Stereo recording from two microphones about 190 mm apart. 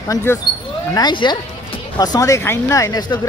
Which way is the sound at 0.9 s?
25° left (ahead or behind).